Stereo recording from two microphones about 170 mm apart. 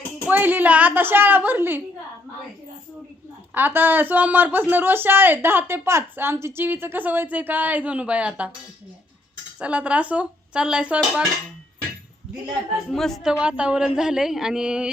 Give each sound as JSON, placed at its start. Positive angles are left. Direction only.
{"t": 0.3, "sound": "speech", "side_deg": -10}
{"t": 3.5, "sound": "speech", "side_deg": -10}
{"t": 9.6, "sound": "speech", "side_deg": -5}
{"t": 12.9, "sound": "a man's voice", "side_deg": 0}